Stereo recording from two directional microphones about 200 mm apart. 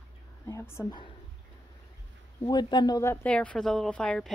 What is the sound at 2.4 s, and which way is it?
A woman's voice, 20° left (ahead or behind).